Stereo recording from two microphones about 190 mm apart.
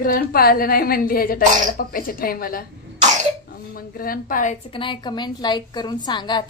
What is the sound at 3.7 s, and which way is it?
Speech, 50° left (ahead or behind).